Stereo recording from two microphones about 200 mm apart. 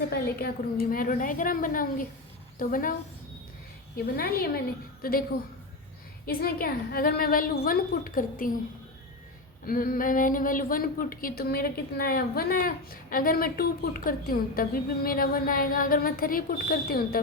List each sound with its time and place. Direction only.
0.1 s speech: 50° left (ahead or behind)
3.9 s speech: 50° left (ahead or behind)
6.2 s speech: 50° left (ahead or behind)
9.6 s speech: 45° left (ahead or behind)